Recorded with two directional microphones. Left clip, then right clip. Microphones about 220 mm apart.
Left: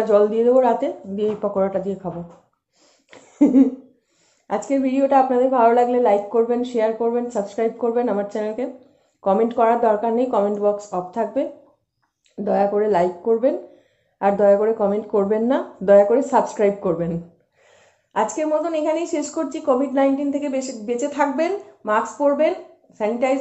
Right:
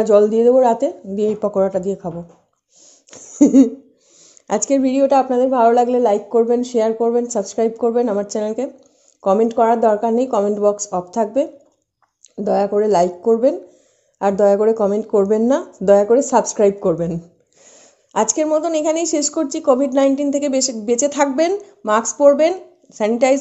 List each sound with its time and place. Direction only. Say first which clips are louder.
0.0 s a woman's voice: right 4 dB; 35° right (ahead or behind)
3.1 s a sound: right 4 dB; 40° right (ahead or behind)
4.5 s a woman's voice: right 4 dB; 40° right (ahead or behind)
12.4 s a woman's voice: right 2 dB; 40° right (ahead or behind)